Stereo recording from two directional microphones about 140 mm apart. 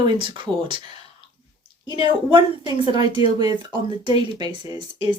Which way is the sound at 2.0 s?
35° right (ahead or behind).